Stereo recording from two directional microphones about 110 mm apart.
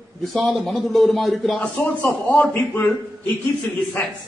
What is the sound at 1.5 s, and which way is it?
A man's voice, 15° left (ahead or behind).